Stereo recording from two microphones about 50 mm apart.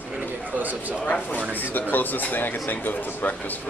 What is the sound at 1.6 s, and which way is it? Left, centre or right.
Speech, left.